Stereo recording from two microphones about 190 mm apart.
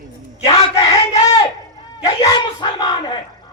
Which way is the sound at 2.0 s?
20° left (ahead or behind).